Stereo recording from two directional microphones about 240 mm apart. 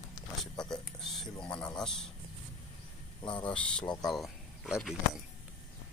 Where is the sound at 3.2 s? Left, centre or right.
Left.